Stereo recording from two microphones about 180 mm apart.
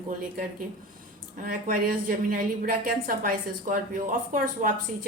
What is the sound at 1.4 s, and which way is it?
A woman's voice, 50° right (ahead or behind).